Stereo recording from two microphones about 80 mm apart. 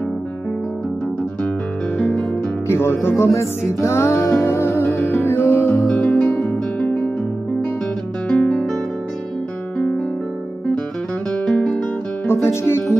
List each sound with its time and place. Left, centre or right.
2.7 s music: left
8.3 s guitar: centre
9.8 s music: centre
11.3 s guitar: centre
12.3 s speech: left